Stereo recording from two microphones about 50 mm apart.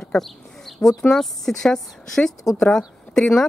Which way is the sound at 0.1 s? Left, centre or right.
Centre.